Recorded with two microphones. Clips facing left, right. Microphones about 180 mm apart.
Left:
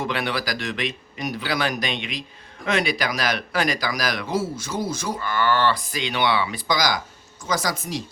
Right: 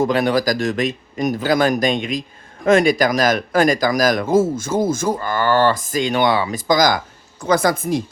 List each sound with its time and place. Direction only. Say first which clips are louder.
0.0 s speech: right 9 dB; 45° right (ahead or behind)